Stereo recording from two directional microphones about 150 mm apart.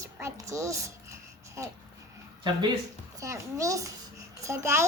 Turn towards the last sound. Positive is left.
turn(degrees=-15)  # may be behind; listen again after turning